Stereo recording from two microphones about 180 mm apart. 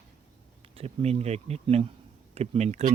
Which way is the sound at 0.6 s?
35° right (ahead or behind).